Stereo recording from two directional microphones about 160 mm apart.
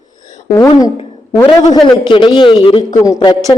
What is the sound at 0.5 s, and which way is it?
Speech, 20° left (ahead or behind).